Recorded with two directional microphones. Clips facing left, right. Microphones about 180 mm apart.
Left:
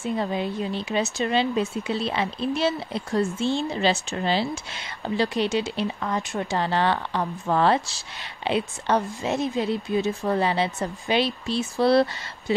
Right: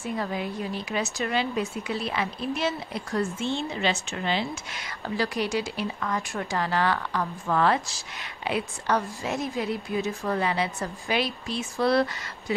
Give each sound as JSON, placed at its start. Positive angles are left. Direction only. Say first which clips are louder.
{"t": 0.1, "sound": "speech", "louder": "left 4 dB", "side_deg": 25}